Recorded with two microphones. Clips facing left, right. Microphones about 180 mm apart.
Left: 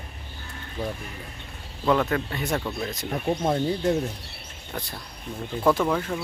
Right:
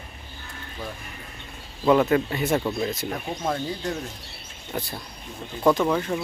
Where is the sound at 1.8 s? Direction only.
10° right (ahead or behind).